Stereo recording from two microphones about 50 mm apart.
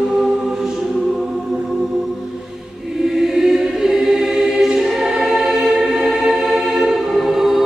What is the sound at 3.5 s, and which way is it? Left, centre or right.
Choir, centre.